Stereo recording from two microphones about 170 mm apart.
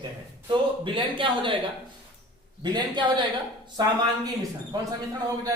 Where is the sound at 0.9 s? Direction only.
30° right (ahead or behind).